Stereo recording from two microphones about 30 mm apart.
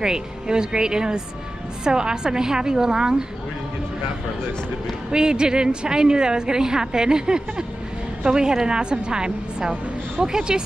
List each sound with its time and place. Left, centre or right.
0.0 s a woman's voice: right
5.1 s a woman's voice: right